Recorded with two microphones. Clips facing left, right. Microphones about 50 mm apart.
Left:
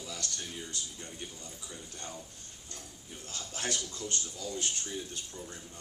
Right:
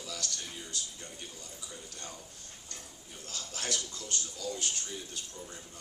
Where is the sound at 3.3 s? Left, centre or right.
Left.